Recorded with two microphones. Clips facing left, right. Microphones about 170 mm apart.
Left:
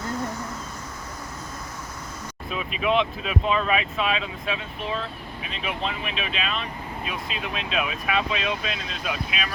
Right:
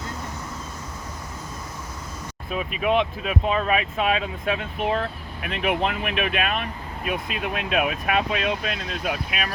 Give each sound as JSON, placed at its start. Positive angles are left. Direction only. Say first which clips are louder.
{"t": 2.5, "sound": "speech", "louder": "right 1 dB", "side_deg": -45}